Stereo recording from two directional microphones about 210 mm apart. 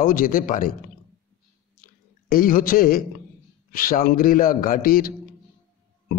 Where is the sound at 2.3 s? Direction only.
40° left (ahead or behind).